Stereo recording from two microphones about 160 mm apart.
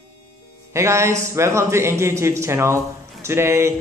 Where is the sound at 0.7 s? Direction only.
15° right (ahead or behind).